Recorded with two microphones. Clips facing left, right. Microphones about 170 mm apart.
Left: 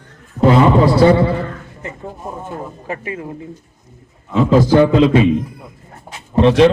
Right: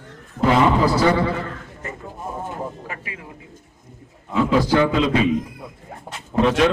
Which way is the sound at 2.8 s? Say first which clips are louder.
Left 9 dB; 35° left (ahead or behind).